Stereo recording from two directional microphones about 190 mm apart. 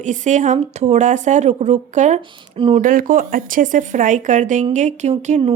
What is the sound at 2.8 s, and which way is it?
A woman's voice, 45° right (ahead or behind).